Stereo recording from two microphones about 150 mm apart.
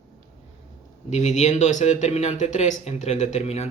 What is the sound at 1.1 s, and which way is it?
Speech, 50° left (ahead or behind).